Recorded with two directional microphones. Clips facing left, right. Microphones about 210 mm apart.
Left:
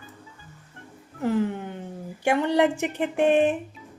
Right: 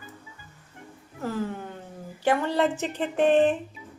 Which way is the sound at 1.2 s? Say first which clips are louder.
Left 6 dB; 20° left (ahead or behind).